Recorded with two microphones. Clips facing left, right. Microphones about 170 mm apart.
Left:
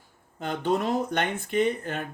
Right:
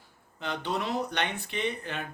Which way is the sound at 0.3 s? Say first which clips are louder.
Left 6 dB; 45° left (ahead or behind).